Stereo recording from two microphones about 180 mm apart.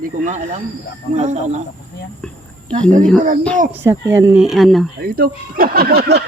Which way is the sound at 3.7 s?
15° right (ahead or behind).